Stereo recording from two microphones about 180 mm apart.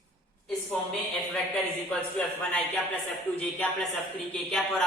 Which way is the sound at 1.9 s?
5° left (ahead or behind).